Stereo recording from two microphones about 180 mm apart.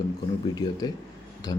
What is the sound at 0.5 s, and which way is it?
Speech, 20° left (ahead or behind).